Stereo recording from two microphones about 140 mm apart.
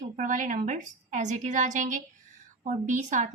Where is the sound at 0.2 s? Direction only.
65° right (ahead or behind).